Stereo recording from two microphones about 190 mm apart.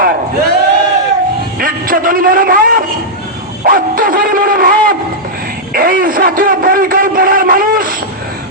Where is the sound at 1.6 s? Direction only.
50° right (ahead or behind).